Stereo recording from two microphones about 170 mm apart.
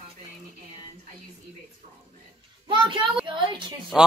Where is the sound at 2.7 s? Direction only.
30° right (ahead or behind).